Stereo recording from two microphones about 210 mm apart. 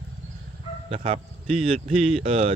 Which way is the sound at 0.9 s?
30° right (ahead or behind).